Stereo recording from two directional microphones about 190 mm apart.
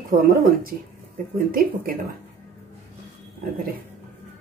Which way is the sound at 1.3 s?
50° right (ahead or behind).